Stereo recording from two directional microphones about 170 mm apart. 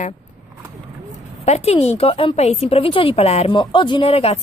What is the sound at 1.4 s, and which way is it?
A woman's voice, 40° left (ahead or behind).